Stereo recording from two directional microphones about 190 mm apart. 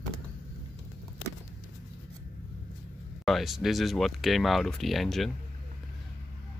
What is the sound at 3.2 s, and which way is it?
Speech, centre (ahead or behind).